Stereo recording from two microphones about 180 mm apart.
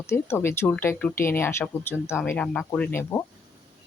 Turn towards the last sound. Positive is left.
turn(degrees=15)  # may be behind; listen again after turning